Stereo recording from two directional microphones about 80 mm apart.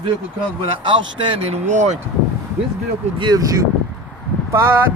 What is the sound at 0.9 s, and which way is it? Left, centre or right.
Speech, right.